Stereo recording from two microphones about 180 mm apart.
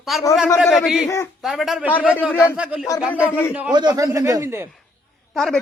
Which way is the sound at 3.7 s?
20° right (ahead or behind).